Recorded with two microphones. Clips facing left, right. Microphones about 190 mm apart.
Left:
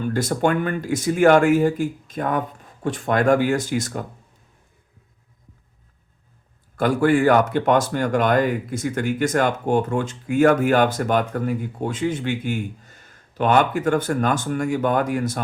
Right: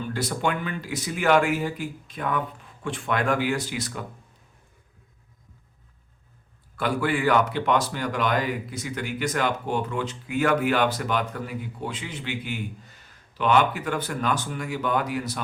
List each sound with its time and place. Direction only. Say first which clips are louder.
0.0 s speech: left 6 dB; 45° left (ahead or behind)
6.7 s speech: left 8 dB; 45° left (ahead or behind)